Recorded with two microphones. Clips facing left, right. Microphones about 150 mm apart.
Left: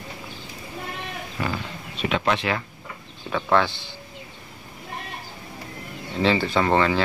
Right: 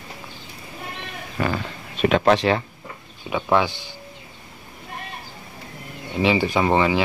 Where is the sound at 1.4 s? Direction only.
55° right (ahead or behind); by 2.6 s 35° right (ahead or behind).